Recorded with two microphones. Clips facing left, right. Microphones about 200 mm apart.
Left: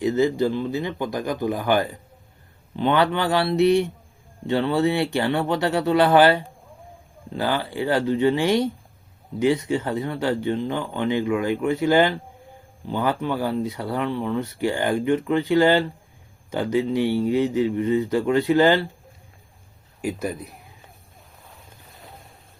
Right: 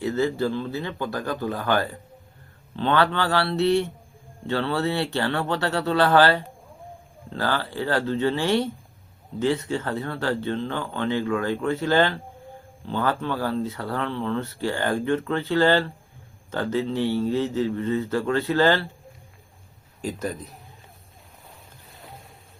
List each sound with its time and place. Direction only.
0.0 s speech: 15° left (ahead or behind)
20.0 s speech: 10° left (ahead or behind)